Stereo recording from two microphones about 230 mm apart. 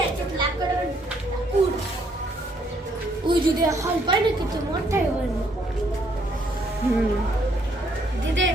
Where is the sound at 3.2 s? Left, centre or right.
Centre.